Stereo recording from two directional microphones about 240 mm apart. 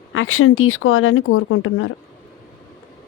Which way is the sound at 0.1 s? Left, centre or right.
Left.